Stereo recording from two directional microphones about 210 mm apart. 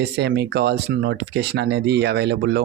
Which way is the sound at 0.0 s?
55° right (ahead or behind).